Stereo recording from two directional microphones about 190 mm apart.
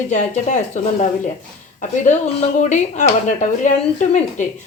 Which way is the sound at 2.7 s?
40° left (ahead or behind).